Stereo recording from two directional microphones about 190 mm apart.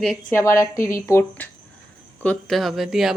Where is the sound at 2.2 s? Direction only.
5° left (ahead or behind).